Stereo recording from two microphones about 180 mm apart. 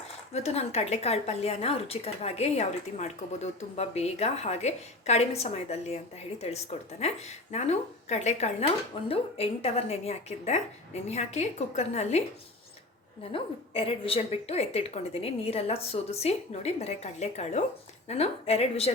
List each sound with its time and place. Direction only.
0.3 s speech: 35° left (ahead or behind)
7.0 s speech: 40° left (ahead or behind)
13.3 s speech: 30° left (ahead or behind)